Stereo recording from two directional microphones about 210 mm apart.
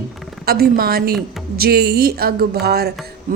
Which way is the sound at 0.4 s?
45° right (ahead or behind).